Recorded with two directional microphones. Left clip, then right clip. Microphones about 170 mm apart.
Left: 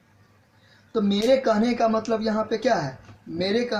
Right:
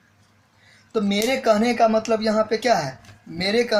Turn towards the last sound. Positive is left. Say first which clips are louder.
# right 3 dB
turn(degrees=-40)  # may be behind; listen again after turning